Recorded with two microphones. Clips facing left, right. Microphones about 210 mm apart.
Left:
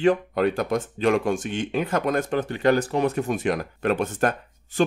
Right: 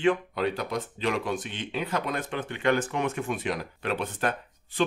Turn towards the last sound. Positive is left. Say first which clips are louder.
# left 7 dB
turn(degrees=45)  # may be behind; listen again after turning